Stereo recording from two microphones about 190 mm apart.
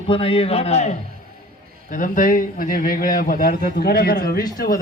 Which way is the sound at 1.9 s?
45° left (ahead or behind).